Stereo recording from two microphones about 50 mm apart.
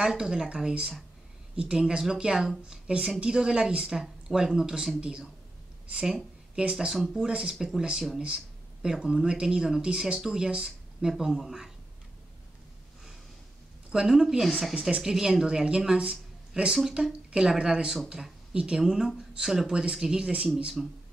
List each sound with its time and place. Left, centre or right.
0.0 s speech: centre
6.5 s speech: centre
7.9 s speech: centre
13.9 s speech: centre
14.8 s speech: centre
18.8 s speech: centre